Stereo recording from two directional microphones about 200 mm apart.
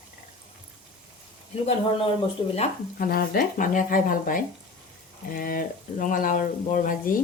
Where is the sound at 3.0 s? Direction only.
50° left (ahead or behind).